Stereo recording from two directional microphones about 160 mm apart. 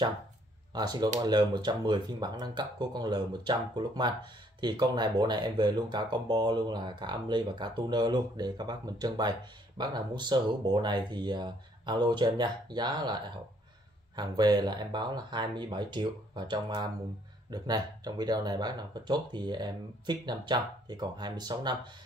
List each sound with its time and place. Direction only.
0.7 s speech: 25° right (ahead or behind)